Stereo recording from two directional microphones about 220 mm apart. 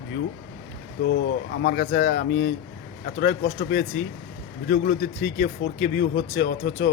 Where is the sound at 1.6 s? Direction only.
45° left (ahead or behind).